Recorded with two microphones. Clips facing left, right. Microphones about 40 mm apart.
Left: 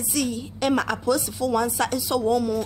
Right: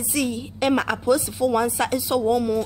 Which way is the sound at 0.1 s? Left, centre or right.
Centre.